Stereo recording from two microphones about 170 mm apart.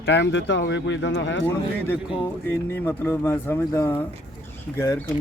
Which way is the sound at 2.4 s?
10° left (ahead or behind).